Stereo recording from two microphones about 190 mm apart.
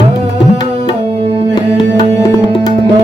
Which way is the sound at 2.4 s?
20° left (ahead or behind).